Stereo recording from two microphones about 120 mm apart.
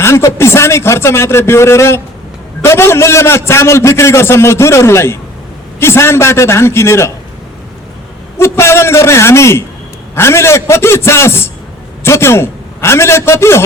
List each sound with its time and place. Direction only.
0.0 s a man's voice: 25° left (ahead or behind)
8.4 s a man's voice: 20° left (ahead or behind)